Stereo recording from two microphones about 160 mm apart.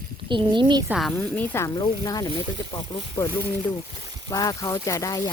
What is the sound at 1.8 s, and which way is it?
Speech, 25° left (ahead or behind).